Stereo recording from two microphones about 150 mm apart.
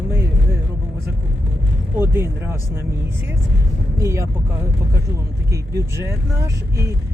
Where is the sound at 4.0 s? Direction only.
20° right (ahead or behind).